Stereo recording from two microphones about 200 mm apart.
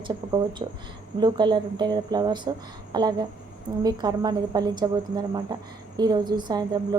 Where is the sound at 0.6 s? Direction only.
25° right (ahead or behind).